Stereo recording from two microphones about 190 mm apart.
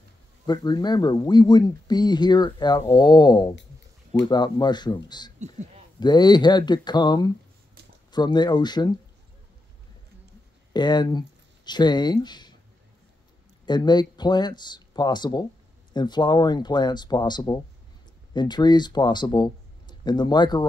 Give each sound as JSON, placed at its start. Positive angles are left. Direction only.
{"t": 0.5, "sound": "speech", "side_deg": 20}
{"t": 10.7, "sound": "speech", "side_deg": 20}
{"t": 13.7, "sound": "speech", "side_deg": 20}